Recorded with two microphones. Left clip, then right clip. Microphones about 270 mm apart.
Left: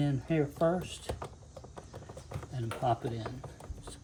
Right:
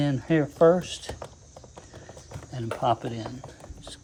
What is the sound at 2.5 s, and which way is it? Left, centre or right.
Speech, centre.